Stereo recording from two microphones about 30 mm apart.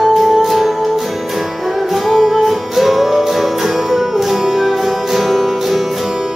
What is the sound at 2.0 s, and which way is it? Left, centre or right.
Music, centre.